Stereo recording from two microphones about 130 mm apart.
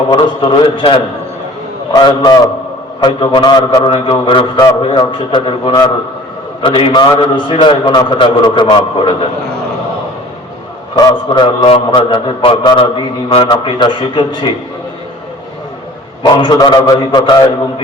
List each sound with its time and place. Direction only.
0.4 s a man's voice: 40° left (ahead or behind)
2.0 s a man's voice: 35° left (ahead or behind)
10.9 s a man's voice: 35° left (ahead or behind)
16.2 s a man's voice: 30° left (ahead or behind)